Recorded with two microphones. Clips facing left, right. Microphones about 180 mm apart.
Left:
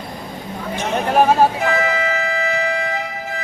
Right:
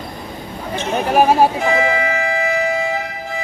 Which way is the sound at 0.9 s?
5° right (ahead or behind).